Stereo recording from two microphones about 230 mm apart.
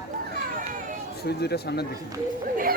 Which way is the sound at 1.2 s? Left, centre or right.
Left.